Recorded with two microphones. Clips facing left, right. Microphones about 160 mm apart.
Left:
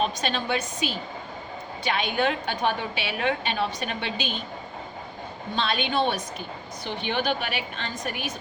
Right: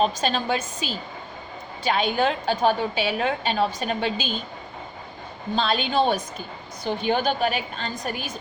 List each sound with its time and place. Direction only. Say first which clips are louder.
0.0 s a woman's voice: right 4 dB; 35° right (ahead or behind)
5.5 s a woman's voice: right 3 dB; 40° right (ahead or behind)